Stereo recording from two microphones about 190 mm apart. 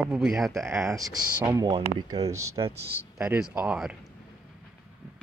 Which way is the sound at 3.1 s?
5° right (ahead or behind).